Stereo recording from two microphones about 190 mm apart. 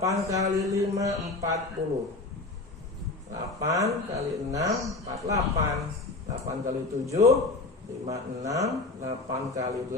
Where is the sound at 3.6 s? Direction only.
15° right (ahead or behind).